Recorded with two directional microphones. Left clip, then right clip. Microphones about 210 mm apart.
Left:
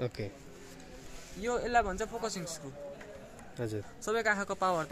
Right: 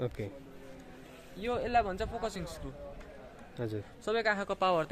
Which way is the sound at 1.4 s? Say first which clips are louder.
Even; 5° right (ahead or behind).